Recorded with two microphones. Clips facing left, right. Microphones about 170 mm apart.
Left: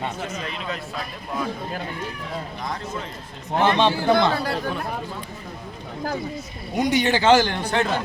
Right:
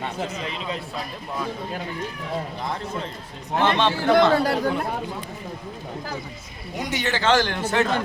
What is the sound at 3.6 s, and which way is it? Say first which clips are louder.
Speech: left 2 dB; 15° left (ahead or behind).